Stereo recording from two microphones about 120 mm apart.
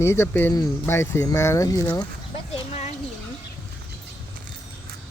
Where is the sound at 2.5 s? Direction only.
65° left (ahead or behind).